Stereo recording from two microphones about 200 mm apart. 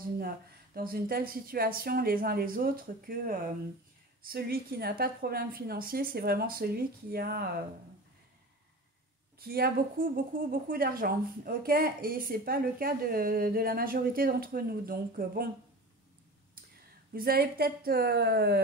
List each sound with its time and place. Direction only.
0.7 s speech: 45° right (ahead or behind)
9.4 s speech: 50° right (ahead or behind)
16.6 s a sound: 45° right (ahead or behind)
17.1 s speech: 50° right (ahead or behind)